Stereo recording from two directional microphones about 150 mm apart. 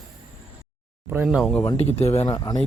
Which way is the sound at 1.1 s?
10° right (ahead or behind).